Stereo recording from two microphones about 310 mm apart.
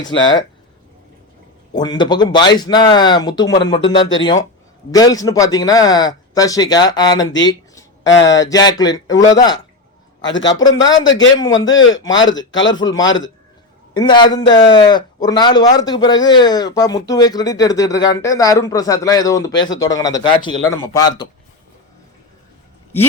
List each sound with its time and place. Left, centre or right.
1.7 s a man's voice: centre
11.5 s a man's voice: left
12.8 s a man's voice: centre
13.1 s a man's voice: left
13.9 s a man's voice: centre